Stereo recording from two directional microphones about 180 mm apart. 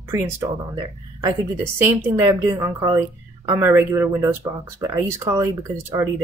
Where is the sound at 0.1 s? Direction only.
15° right (ahead or behind).